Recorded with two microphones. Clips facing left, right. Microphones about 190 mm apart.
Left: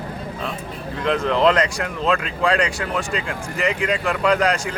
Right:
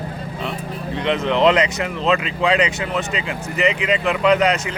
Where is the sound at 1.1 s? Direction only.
Centre (ahead or behind).